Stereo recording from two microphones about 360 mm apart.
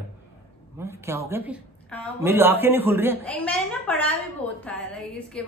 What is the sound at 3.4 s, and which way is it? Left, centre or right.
A man's voice, centre.